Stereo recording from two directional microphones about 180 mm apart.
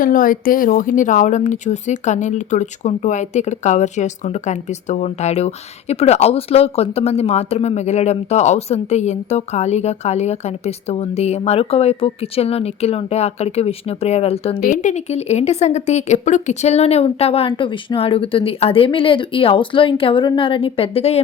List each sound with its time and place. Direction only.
0.0 s speech: 50° left (ahead or behind); by 14.6 s 35° left (ahead or behind)
14.6 s speech: 45° left (ahead or behind)